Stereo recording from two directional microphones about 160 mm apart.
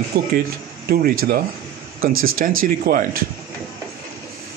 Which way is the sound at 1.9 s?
60° right (ahead or behind).